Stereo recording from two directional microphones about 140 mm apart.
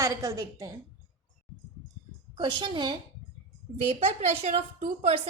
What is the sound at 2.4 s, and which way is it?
Speech, 35° right (ahead or behind).